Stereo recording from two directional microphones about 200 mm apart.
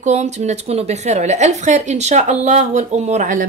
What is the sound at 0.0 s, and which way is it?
A woman's voice, 35° right (ahead or behind).